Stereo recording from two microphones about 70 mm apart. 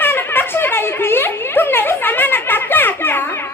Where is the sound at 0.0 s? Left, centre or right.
Left.